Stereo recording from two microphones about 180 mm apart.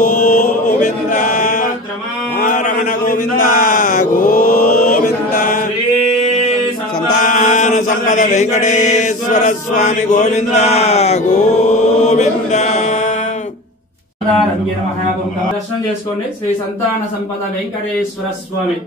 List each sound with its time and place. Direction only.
0.0 s chant: 45° left (ahead or behind)
2.3 s a sound: 45° left (ahead or behind)
7.2 s chant: 45° left (ahead or behind)